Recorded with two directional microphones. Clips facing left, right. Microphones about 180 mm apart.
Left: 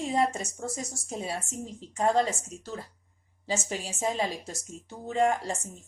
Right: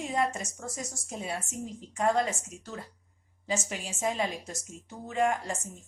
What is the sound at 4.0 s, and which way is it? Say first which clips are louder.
A woman's voice: even; 30° left (ahead or behind).